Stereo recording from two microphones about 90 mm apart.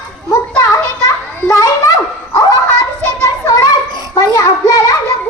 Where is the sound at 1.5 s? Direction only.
35° left (ahead or behind).